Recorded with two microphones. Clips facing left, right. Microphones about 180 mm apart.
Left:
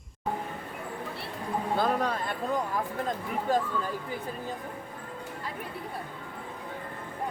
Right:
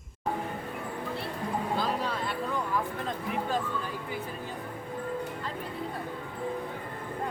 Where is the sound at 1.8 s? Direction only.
50° left (ahead or behind).